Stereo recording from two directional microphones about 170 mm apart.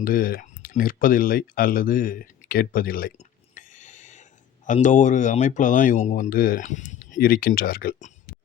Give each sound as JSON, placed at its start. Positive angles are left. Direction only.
{"t": 0.0, "sound": "speech", "side_deg": 55}